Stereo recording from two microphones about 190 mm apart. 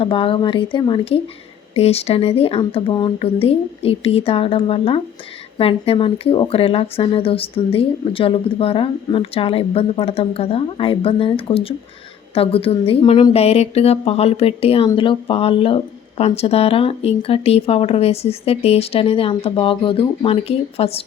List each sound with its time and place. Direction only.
0.0 s speech: 30° left (ahead or behind)